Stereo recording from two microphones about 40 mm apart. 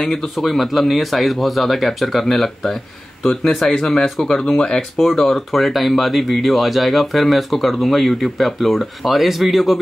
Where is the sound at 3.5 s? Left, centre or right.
Centre.